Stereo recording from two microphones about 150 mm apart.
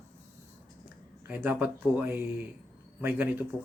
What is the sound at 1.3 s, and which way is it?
Speech, 10° right (ahead or behind).